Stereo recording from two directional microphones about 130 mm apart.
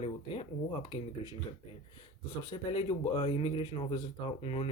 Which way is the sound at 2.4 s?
35° left (ahead or behind).